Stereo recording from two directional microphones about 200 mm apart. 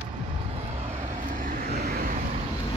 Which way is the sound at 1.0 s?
40° right (ahead or behind).